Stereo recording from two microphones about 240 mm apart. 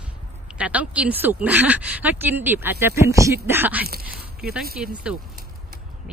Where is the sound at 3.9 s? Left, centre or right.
Right.